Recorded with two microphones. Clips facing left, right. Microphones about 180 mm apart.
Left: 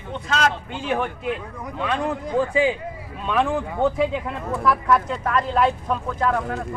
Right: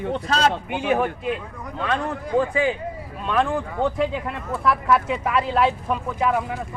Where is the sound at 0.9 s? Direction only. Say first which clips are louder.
Right 2 dB; 5° right (ahead or behind).